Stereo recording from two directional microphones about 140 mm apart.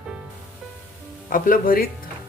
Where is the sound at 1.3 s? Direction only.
80° left.